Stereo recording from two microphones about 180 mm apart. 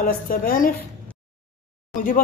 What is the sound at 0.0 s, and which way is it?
Speech, 50° left (ahead or behind).